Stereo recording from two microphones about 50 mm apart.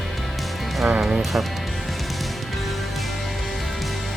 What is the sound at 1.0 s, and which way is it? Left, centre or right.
Music, centre.